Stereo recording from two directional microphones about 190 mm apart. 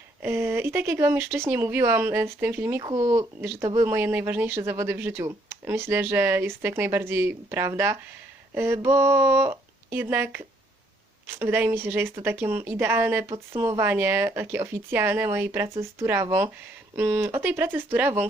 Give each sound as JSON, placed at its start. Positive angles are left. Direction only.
{"t": 0.2, "sound": "speech", "side_deg": -10}
{"t": 2.8, "sound": "speech", "side_deg": -25}
{"t": 13.3, "sound": "speech", "side_deg": -20}